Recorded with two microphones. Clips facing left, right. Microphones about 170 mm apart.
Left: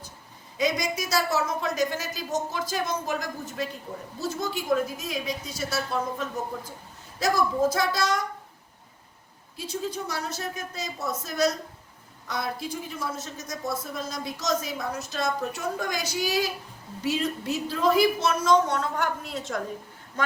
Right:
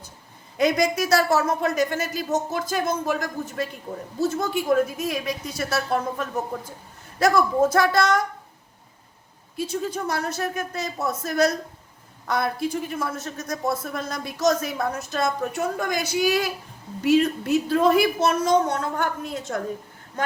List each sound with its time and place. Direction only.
0.5 s a man's voice: 60° right (ahead or behind)
9.6 s a man's voice: 55° right (ahead or behind)